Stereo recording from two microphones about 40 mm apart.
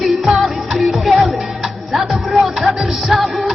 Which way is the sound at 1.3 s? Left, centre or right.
Centre.